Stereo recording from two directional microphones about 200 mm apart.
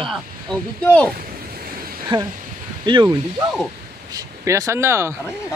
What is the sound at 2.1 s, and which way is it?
Speech, 25° right (ahead or behind).